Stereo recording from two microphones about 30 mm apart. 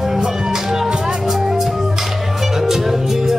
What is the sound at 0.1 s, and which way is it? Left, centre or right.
Music, centre.